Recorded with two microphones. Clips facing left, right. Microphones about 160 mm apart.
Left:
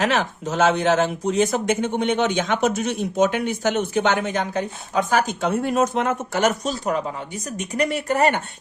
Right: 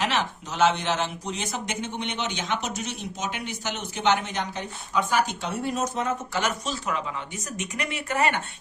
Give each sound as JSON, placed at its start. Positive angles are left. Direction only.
{"t": 0.0, "sound": "speech", "side_deg": 50}